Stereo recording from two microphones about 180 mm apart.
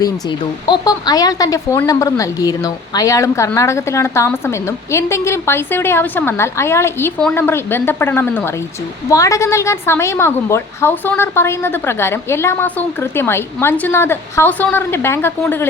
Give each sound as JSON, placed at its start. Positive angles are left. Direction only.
{"t": 0.0, "sound": "speech", "side_deg": 25}